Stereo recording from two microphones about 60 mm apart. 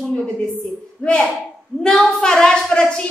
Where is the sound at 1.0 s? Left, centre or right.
Left.